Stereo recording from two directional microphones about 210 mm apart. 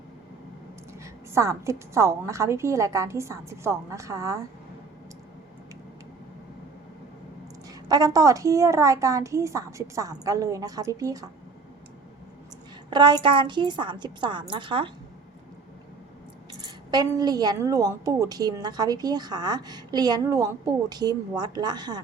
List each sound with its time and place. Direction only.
0.9 s a woman's voice: 15° right (ahead or behind)
7.7 s a woman's voice: 20° right (ahead or behind)
12.9 s a woman's voice: 20° right (ahead or behind)
16.5 s a woman's voice: 20° right (ahead or behind)